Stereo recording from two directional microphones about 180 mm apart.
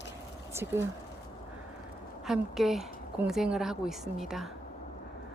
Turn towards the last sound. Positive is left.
turn(degrees=0)  # may be behind; listen again after turning